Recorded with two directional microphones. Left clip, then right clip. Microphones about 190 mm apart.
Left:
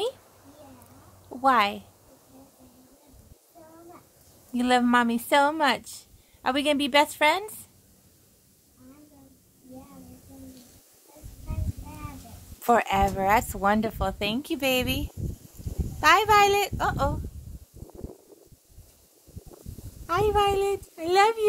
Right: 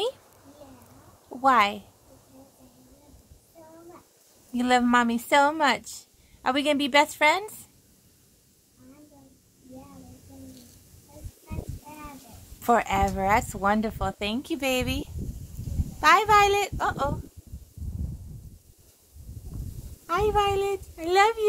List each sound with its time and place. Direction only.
1.3 s a woman's voice: 5° left (ahead or behind)
4.5 s a woman's voice: 5° left (ahead or behind)
12.6 s a woman's voice: 10° left (ahead or behind)
20.1 s speech: 20° left (ahead or behind)